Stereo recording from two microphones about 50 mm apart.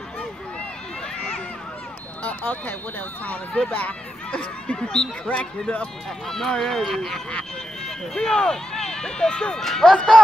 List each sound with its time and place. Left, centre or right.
2.2 s speech: left
4.8 s speech: centre
5.3 s speech: left
6.2 s speech: centre
9.6 s speech: centre